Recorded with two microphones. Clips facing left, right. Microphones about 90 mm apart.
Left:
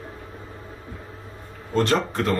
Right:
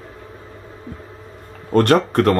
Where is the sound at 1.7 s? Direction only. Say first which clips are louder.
Right 7 dB; 55° right (ahead or behind).